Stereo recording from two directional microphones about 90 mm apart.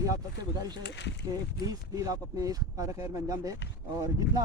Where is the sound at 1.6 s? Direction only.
40° right (ahead or behind).